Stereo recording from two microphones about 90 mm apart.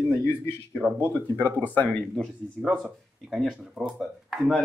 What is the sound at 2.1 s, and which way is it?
Speech, centre (ahead or behind).